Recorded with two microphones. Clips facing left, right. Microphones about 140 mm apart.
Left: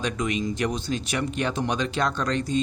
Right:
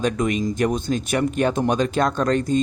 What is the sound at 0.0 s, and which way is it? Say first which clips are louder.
Speech: right 5 dB; 45° right (ahead or behind).